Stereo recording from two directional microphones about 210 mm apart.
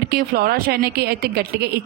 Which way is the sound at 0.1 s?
45° right (ahead or behind).